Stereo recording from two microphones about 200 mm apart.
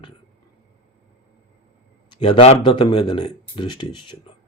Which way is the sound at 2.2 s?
30° left (ahead or behind).